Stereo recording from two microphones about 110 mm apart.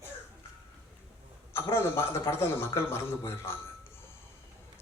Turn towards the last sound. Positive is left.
turn(degrees=20)  # may be behind; listen again after turning